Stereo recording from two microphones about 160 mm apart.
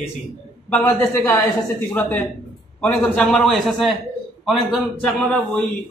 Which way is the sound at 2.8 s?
5° left (ahead or behind).